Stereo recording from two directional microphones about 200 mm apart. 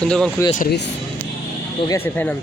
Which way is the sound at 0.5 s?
50° left (ahead or behind).